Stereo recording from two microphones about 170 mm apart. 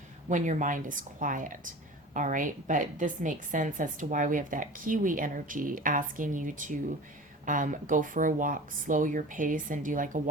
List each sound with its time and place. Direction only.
0.3 s a woman's voice: 50° right (ahead or behind)